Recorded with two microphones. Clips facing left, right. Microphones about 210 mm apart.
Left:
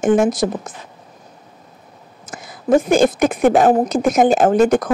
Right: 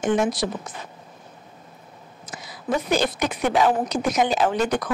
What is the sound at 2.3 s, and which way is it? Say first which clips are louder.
Speech: left 11 dB; 50° left (ahead or behind).